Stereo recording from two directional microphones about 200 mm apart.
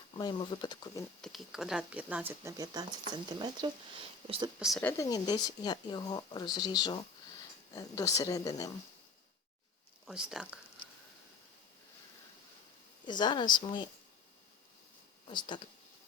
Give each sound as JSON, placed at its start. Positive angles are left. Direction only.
{"t": 0.2, "sound": "speech", "side_deg": 20}
{"t": 1.2, "sound": "speech", "side_deg": 0}
{"t": 4.6, "sound": "speech", "side_deg": 0}
{"t": 4.9, "sound": "speech", "side_deg": 15}
{"t": 10.1, "sound": "speech", "side_deg": -5}
{"t": 13.1, "sound": "speech", "side_deg": 20}
{"t": 15.3, "sound": "speech", "side_deg": 25}